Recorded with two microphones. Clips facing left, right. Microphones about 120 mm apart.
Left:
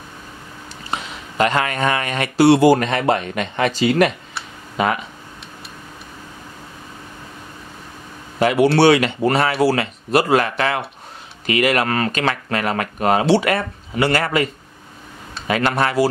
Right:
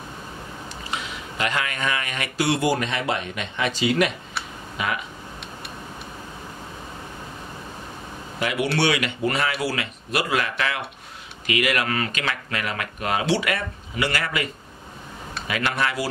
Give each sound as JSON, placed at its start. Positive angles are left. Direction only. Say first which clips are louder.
{"t": 0.9, "sound": "speech", "louder": "left 9 dB", "side_deg": 40}
{"t": 2.7, "sound": "speech", "louder": "left 8 dB", "side_deg": 50}
{"t": 8.4, "sound": "speech", "louder": "left 9 dB", "side_deg": 35}